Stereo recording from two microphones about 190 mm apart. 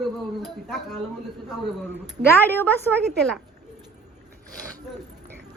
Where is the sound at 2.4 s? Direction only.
10° left (ahead or behind).